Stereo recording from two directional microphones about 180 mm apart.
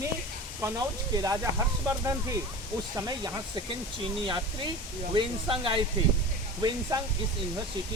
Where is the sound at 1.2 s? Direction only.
15° right (ahead or behind).